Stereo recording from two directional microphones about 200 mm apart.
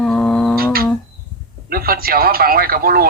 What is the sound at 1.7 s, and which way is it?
Speech, 50° right (ahead or behind).